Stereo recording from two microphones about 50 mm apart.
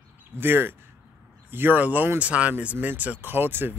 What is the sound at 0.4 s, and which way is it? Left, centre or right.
Speech, right.